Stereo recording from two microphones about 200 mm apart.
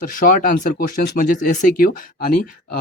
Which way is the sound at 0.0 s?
45° left (ahead or behind).